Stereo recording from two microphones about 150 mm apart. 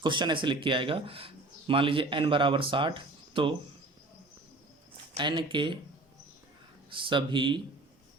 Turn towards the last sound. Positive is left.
turn(degrees=-30)  # may be behind; listen again after turning